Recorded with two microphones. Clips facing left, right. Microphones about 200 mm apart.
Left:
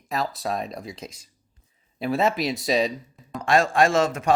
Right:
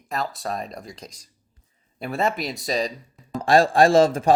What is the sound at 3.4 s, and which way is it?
Speech, 35° right (ahead or behind).